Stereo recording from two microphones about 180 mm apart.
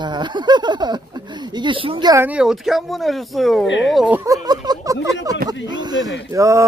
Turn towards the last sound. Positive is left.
turn(degrees=-15)  # may be behind; listen again after turning